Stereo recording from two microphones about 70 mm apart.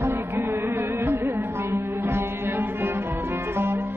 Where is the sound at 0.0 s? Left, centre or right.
Right.